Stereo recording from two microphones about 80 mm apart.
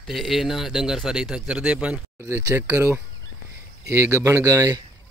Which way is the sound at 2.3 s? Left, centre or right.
Right.